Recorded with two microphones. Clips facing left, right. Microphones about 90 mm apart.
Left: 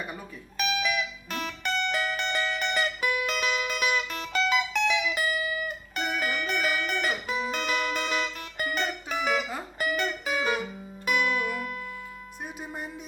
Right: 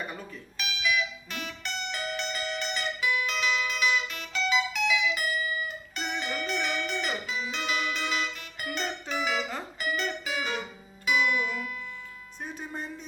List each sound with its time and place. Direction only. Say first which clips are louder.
0.5 s music: left 2 dB; 45° left (ahead or behind)